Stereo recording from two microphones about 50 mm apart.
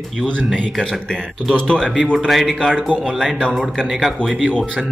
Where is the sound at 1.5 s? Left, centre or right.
Centre.